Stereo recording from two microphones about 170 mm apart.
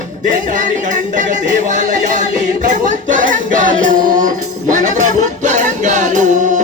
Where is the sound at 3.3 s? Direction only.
50° right (ahead or behind).